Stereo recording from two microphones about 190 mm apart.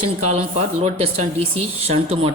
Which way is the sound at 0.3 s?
35° right (ahead or behind).